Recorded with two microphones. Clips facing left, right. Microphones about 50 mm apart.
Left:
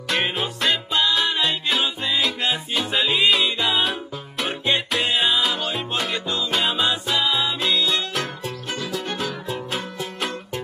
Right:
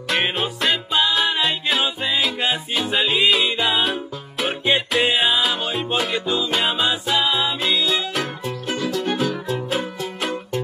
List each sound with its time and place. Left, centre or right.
0.1 s music: centre